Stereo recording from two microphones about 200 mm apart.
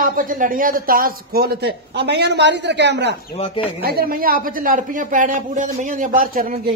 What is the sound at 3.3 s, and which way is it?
Speech, 30° left (ahead or behind).